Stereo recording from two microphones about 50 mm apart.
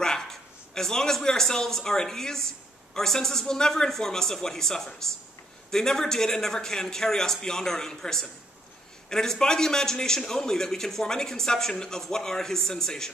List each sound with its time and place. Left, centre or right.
0.0 s a man's voice: centre